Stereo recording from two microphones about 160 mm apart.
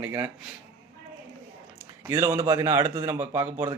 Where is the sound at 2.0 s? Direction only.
20° right (ahead or behind).